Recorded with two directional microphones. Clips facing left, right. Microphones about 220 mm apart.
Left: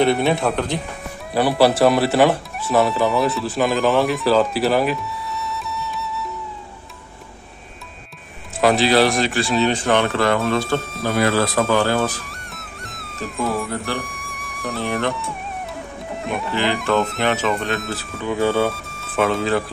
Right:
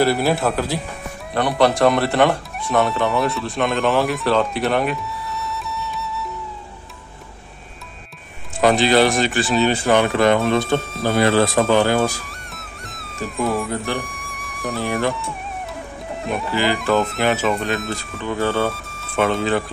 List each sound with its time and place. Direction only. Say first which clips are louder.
0.0 s speech: even; 5° right (ahead or behind)
8.5 s speech: right 1 dB; centre (ahead or behind); by 10.8 s 20° right (ahead or behind)
10.8 s speech: right 2 dB; centre (ahead or behind)
11.1 s speech: right 2 dB; 25° right (ahead or behind)
12.3 s music: even; centre (ahead or behind)
13.9 s speech: right 1 dB; centre (ahead or behind)
18.2 s speech: left 2 dB; 10° left (ahead or behind)
18.7 s speech: even; centre (ahead or behind)